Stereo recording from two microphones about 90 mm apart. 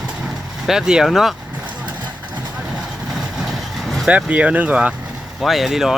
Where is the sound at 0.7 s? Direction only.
5° right (ahead or behind).